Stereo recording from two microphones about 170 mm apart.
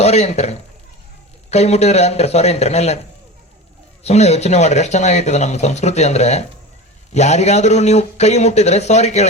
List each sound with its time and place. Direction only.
0.0 s speech: 40° left (ahead or behind)
4.0 s speech: 40° left (ahead or behind)